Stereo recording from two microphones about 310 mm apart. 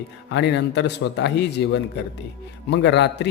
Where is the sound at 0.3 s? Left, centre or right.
Left.